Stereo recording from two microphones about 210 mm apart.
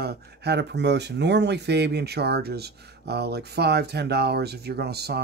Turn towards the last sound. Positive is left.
turn(degrees=-50)  # may be behind; listen again after turning